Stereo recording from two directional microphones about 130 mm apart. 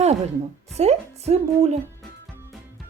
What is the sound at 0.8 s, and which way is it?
A woman's voice, 55° right (ahead or behind).